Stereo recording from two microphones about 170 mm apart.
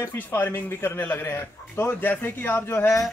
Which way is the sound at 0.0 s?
15° left (ahead or behind).